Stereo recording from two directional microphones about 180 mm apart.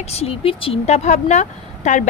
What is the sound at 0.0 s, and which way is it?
Speech, 35° left (ahead or behind).